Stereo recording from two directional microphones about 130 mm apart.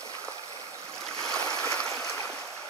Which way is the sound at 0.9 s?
5° left (ahead or behind).